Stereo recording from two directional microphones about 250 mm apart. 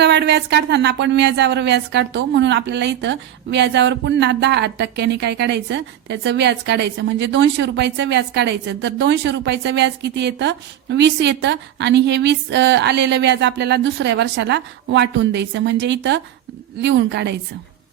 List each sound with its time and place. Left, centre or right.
0.0 s speech: right